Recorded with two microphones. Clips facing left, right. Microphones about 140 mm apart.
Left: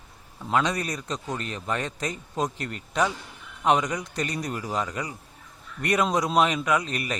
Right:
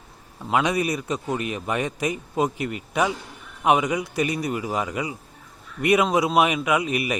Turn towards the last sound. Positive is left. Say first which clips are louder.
# right 3 dB
turn(degrees=-10)  # may be behind; listen again after turning